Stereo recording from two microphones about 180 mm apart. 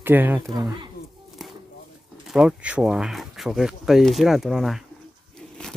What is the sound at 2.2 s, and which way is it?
Speech, 5° right (ahead or behind).